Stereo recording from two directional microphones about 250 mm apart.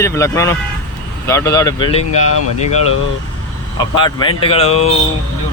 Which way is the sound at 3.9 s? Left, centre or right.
Centre.